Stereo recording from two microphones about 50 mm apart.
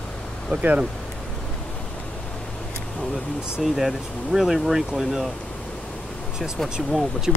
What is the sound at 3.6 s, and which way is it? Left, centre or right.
Speech, centre.